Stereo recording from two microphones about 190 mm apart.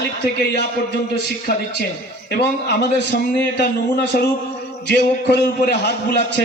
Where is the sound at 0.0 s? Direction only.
60° left (ahead or behind).